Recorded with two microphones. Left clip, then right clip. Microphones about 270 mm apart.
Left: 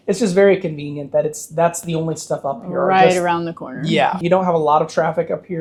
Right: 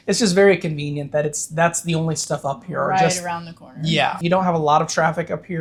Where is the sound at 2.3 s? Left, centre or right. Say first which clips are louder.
Left 3 dB; right.